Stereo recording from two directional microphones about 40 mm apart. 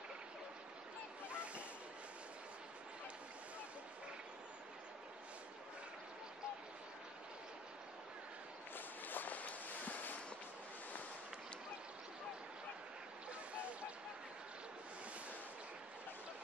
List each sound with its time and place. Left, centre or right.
1.3 s honk: right
8.7 s walk: left
13.3 s a sound: right